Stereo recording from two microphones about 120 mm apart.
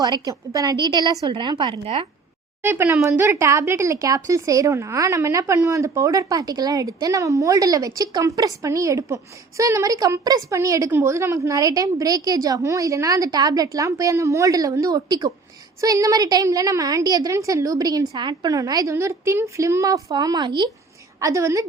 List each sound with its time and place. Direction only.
0.0 s a woman's voice: 30° right (ahead or behind)
1.8 s speech: 55° right (ahead or behind)
2.6 s a woman's voice: 20° right (ahead or behind); by 20.7 s 40° right (ahead or behind)
21.2 s a woman's voice: 25° right (ahead or behind)